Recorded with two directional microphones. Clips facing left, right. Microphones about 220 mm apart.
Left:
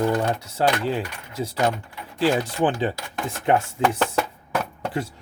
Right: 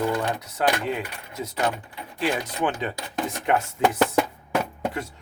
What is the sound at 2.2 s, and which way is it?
Speech, 30° left (ahead or behind).